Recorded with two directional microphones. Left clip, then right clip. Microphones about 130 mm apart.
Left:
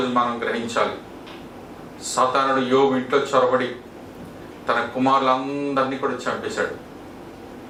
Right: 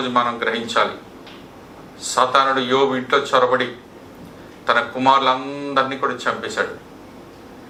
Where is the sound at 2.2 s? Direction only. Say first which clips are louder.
Right 3 dB; 35° right (ahead or behind).